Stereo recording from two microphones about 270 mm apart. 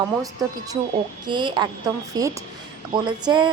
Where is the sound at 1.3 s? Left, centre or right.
Centre.